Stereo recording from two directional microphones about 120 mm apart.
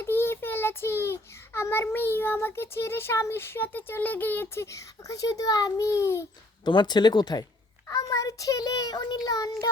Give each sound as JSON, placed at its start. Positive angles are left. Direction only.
{"t": 0.0, "sound": "a child's voice", "side_deg": 20}
{"t": 6.7, "sound": "a child's voice", "side_deg": 40}